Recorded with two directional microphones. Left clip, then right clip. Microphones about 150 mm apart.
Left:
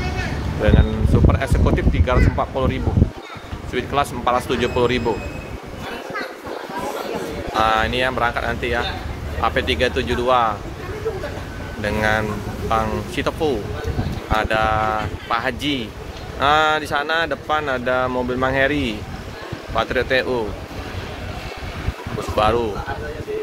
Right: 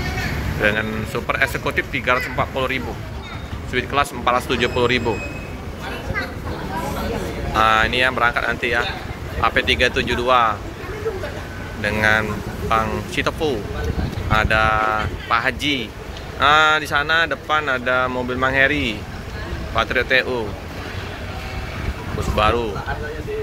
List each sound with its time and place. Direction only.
0.6 s speech: 20° left (ahead or behind)
7.5 s speech: 20° left (ahead or behind)
11.8 s speech: 25° left (ahead or behind)
22.3 s speech: 35° left (ahead or behind)